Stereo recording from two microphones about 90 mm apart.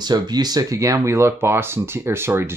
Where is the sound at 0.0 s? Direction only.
50° right (ahead or behind).